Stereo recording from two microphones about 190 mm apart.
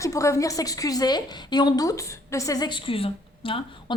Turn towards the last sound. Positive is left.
turn(degrees=30)  # may be behind; listen again after turning